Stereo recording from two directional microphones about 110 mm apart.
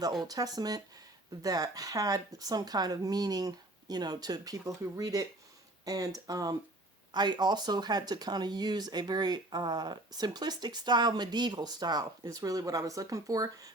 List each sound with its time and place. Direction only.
0.2 s speech: 35° right (ahead or behind)